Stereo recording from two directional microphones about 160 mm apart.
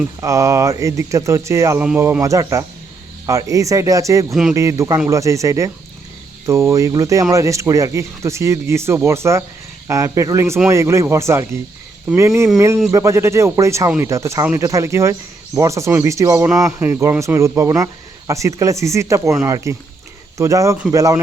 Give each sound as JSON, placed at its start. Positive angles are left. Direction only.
{"t": 0.2, "sound": "speech", "side_deg": -20}